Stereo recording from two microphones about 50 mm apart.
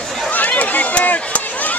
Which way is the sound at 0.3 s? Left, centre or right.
Left.